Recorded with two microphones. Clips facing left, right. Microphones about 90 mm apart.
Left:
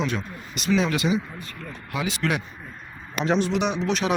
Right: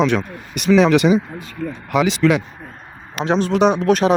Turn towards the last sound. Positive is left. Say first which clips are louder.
# right 10 dB
turn(degrees=-45)  # may be behind; listen again after turning